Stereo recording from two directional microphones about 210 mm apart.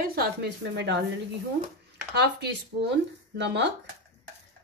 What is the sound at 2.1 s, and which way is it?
Speech, 55° right (ahead or behind).